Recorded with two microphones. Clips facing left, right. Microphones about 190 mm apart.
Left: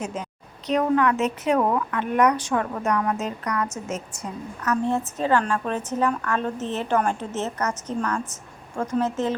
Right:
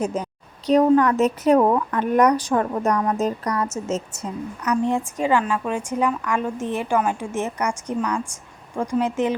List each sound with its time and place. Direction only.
0.0 s a woman's voice: 40° right (ahead or behind); by 9.3 s 15° right (ahead or behind)